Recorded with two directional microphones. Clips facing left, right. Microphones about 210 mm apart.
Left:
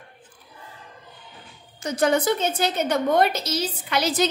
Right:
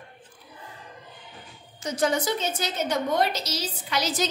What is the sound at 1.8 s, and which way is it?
A woman's voice, 60° left (ahead or behind).